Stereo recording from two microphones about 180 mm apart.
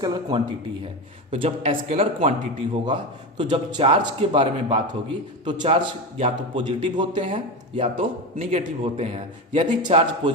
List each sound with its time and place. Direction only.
0.0 s a man's voice: 25° right (ahead or behind)